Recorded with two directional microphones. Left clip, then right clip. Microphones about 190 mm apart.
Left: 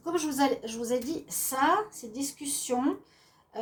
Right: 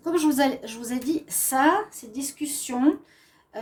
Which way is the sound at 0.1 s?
50° right (ahead or behind).